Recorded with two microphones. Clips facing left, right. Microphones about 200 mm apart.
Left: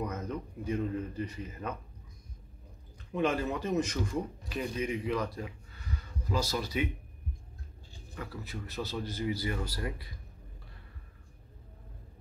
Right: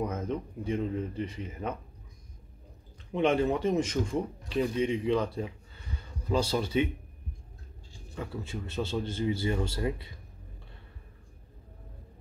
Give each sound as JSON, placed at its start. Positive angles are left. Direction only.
{"t": 0.0, "sound": "a man's voice", "side_deg": -25}
{"t": 3.1, "sound": "speech", "side_deg": -25}
{"t": 8.2, "sound": "a man's voice", "side_deg": -25}